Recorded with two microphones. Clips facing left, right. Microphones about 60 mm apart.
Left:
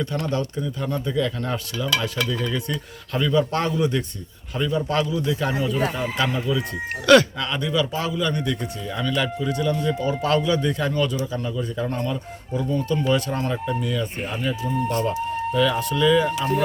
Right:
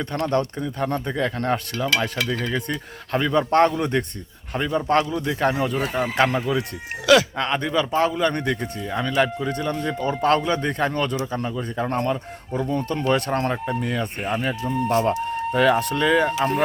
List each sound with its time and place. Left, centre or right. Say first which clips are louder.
0.0 s speech: right 2 dB; right
14.6 s speech: even; centre
15.3 s a sound: even; centre
15.5 s speech: right 3 dB; right